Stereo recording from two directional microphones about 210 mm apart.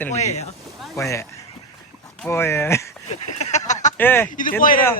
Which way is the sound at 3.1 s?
35° left (ahead or behind).